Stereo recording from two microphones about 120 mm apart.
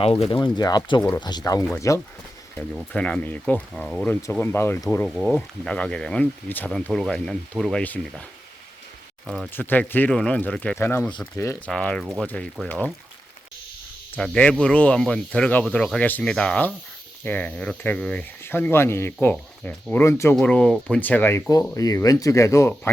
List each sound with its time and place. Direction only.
0.0 s speech: 60° left (ahead or behind)
0.3 s speech: 35° left (ahead or behind)
2.9 s speech: 10° left (ahead or behind)
5.0 s speech: centre (ahead or behind)
9.2 s speech: 5° right (ahead or behind)
9.5 s speech: 15° left (ahead or behind)
14.2 s speech: 10° left (ahead or behind)
20.4 s speech: 10° left (ahead or behind)
21.8 s speech: 30° left (ahead or behind)